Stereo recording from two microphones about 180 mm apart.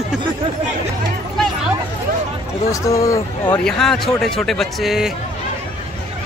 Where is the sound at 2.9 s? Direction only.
15° left (ahead or behind).